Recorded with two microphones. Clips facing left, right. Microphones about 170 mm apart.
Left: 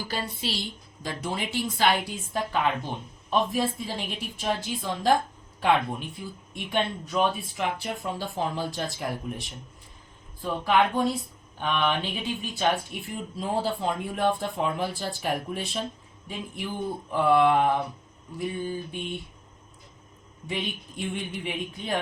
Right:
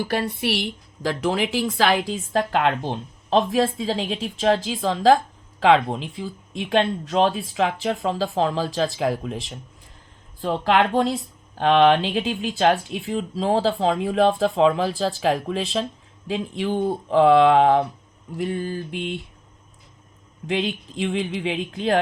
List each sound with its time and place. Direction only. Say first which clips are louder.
0.0 s a woman's voice: right 8 dB; 65° right (ahead or behind)
1.0 s a woman's voice: right 9 dB; 90° right
20.5 s a woman's voice: right 8 dB; 90° right